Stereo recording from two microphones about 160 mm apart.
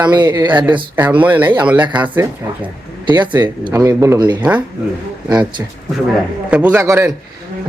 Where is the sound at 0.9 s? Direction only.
10° right (ahead or behind).